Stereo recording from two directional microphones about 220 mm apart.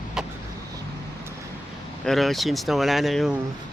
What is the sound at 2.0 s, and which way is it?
Speech, centre (ahead or behind).